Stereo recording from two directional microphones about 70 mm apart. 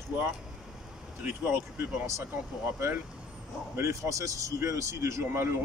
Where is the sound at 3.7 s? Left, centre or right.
Right.